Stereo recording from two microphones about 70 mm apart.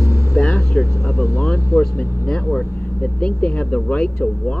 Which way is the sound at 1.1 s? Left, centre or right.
Left.